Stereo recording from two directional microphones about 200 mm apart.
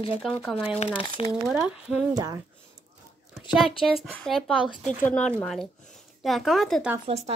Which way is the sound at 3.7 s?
25° left (ahead or behind).